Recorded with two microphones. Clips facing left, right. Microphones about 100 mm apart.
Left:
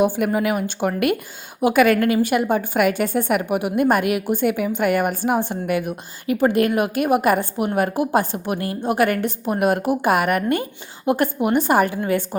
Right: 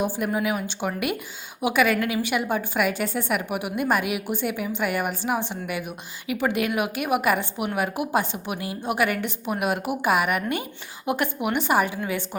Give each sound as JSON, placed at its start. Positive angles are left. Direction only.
{"t": 0.0, "sound": "a woman's voice", "side_deg": 60}
{"t": 8.8, "sound": "a woman's voice", "side_deg": 40}